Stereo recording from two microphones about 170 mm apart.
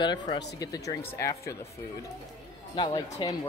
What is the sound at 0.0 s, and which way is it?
Speech, 25° left (ahead or behind).